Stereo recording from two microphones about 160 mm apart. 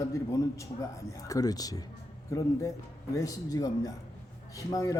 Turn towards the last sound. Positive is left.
turn(degrees=20)  # may be behind; listen again after turning